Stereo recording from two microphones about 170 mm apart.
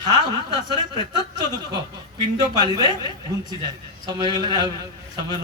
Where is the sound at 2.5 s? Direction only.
25° right (ahead or behind).